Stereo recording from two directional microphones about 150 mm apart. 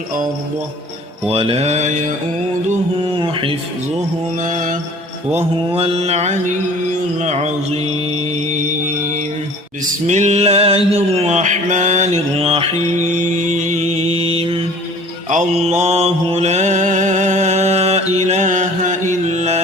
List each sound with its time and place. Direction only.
1.3 s a sound: 40° right (ahead or behind)
3.2 s mantra: 35° right (ahead or behind)
4.4 s mantra: 55° right (ahead or behind)
5.3 s a sound: 40° right (ahead or behind)
9.8 s a sound: 50° right (ahead or behind)
12.4 s mantra: 40° right (ahead or behind)
13.1 s music: 55° right (ahead or behind); by 14.7 s 40° right (ahead or behind)
15.3 s mantra: 50° right (ahead or behind)
19.3 s music: 45° right (ahead or behind)